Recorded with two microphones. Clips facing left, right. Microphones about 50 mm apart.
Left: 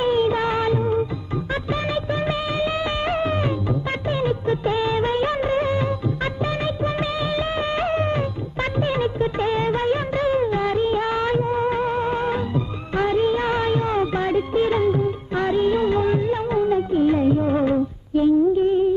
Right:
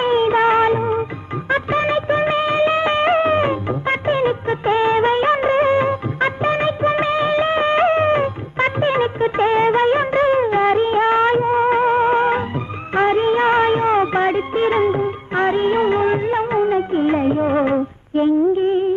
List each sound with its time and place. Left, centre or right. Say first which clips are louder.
0.0 s music of bollywood: right 4 dB; right